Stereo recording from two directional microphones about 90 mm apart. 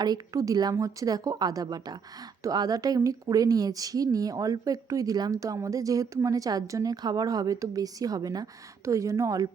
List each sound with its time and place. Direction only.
0.0 s a woman's voice: 45° right (ahead or behind)